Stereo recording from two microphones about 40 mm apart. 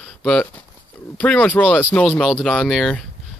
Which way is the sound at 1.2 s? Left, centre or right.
Left.